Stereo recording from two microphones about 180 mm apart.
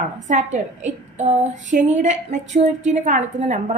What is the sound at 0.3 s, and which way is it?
Speech, 40° right (ahead or behind).